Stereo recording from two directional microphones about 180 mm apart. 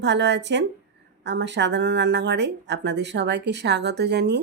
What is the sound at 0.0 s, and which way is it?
Speech, 75° right (ahead or behind).